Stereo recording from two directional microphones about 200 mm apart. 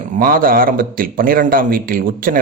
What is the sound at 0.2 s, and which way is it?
A man's voice, 45° right (ahead or behind).